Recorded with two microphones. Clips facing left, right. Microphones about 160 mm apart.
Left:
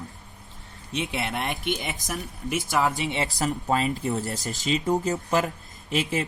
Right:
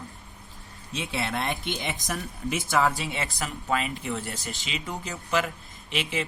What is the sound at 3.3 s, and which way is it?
Speech, 35° left (ahead or behind).